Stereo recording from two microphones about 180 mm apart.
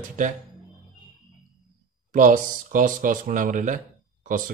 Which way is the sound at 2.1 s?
45° right (ahead or behind).